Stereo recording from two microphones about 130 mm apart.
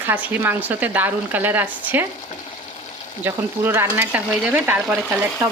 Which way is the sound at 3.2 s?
15° right (ahead or behind).